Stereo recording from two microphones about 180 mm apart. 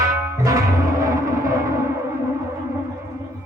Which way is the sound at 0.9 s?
20° right (ahead or behind).